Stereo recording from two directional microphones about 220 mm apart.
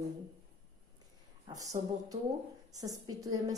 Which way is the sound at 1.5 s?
15° right (ahead or behind).